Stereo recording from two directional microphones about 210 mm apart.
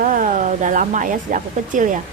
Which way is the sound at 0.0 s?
40° right (ahead or behind).